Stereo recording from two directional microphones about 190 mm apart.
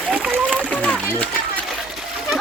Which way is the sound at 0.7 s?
5° left (ahead or behind).